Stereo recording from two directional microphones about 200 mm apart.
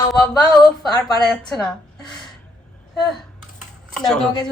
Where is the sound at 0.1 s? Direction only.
Centre (ahead or behind).